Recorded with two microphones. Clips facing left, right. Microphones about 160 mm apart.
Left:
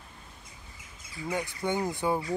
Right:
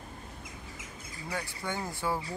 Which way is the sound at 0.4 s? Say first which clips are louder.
Right 7 dB; 90° right.